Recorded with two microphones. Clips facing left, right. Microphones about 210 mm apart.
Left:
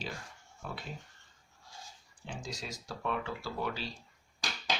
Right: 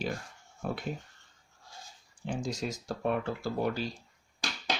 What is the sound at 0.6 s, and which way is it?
Speech, 50° right (ahead or behind).